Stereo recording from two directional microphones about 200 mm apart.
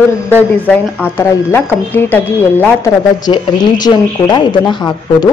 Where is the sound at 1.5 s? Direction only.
10° left (ahead or behind).